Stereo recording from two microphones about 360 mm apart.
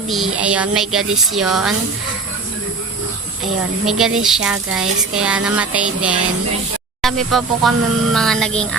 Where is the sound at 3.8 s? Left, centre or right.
Centre.